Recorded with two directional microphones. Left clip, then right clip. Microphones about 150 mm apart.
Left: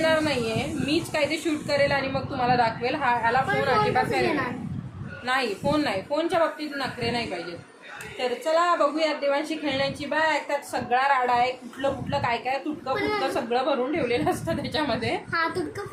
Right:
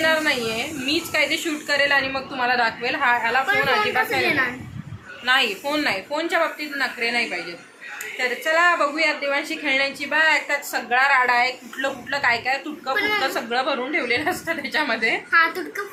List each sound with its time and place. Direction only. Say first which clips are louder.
0.0 s a woman's voice: right 3 dB; centre (ahead or behind)
8.5 s a woman's voice: right 3 dB; centre (ahead or behind)
15.3 s a woman's voice: right 9 dB; 20° left (ahead or behind)